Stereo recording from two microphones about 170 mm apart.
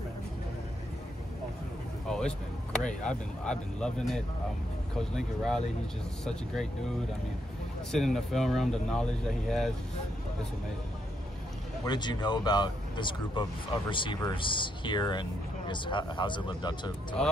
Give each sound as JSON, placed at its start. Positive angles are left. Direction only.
{"t": 2.0, "sound": "speech", "side_deg": 5}
{"t": 7.9, "sound": "speech", "side_deg": 0}
{"t": 11.8, "sound": "speech", "side_deg": 25}
{"t": 17.2, "sound": "speech", "side_deg": 5}